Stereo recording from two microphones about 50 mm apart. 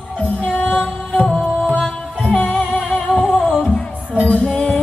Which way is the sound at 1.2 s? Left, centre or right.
Centre.